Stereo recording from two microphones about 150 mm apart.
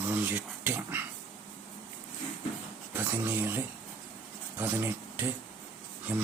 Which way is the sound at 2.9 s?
15° right (ahead or behind).